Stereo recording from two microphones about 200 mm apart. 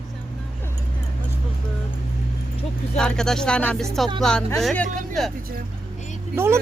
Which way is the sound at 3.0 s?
5° left (ahead or behind).